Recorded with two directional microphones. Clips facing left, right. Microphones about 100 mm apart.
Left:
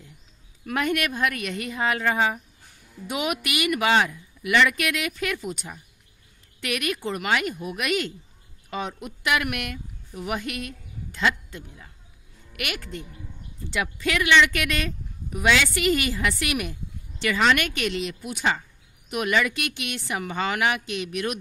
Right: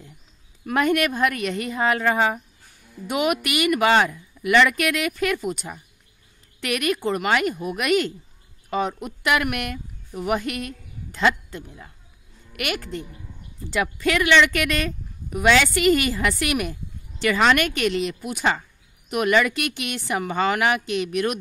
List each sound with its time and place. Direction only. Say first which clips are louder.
0.7 s a woman's voice: right 5 dB; 35° right (ahead or behind)